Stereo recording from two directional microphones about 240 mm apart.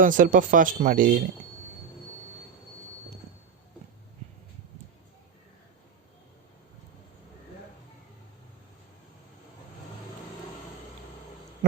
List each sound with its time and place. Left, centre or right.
0.0 s speech: right